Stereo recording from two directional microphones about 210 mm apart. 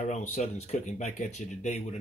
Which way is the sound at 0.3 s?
30° left (ahead or behind).